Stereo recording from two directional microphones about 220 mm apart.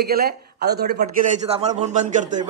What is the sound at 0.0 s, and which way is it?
Speech, 45° right (ahead or behind).